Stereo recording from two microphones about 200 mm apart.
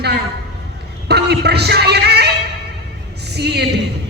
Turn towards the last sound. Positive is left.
turn(degrees=-55)  # may be behind; listen again after turning